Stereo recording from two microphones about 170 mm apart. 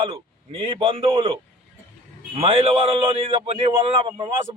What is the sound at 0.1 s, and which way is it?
A man's voice, 30° right (ahead or behind).